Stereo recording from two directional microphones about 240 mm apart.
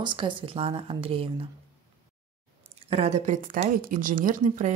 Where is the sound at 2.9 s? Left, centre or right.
Right.